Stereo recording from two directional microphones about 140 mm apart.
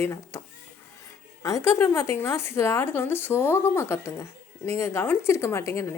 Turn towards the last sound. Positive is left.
turn(degrees=20)  # may be behind; listen again after turning